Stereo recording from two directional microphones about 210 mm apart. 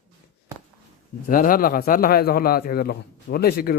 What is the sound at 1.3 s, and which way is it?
A man's voice, 40° left (ahead or behind).